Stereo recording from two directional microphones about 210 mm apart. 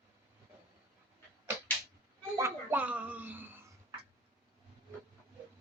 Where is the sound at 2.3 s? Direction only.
10° right (ahead or behind).